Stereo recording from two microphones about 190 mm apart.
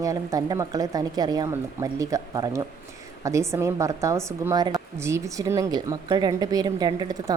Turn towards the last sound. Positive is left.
turn(degrees=-20)  # may be behind; listen again after turning